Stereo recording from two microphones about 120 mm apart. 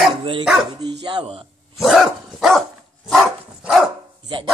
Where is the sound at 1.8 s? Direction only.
5° right (ahead or behind).